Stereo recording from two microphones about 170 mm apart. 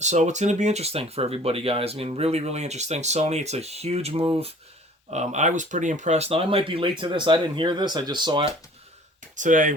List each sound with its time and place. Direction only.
0.0 s speech: 45° right (ahead or behind)
9.3 s speech: 50° right (ahead or behind)